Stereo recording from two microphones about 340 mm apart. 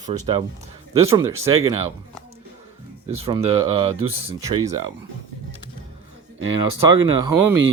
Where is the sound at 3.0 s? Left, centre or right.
Centre.